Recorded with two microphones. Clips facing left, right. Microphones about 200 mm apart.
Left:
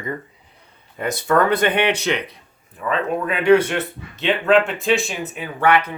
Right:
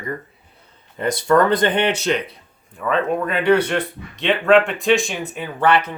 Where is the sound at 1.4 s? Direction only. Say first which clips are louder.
Right 1 dB; 10° left (ahead or behind).